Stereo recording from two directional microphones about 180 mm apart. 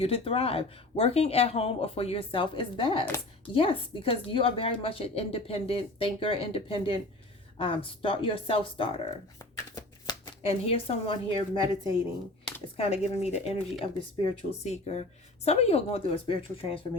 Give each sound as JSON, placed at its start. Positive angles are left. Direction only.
{"t": 0.0, "sound": "a woman's voice", "side_deg": 30}
{"t": 10.4, "sound": "a woman's voice", "side_deg": 35}